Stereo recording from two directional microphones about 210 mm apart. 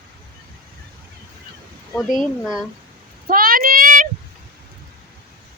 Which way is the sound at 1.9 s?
Centre (ahead or behind).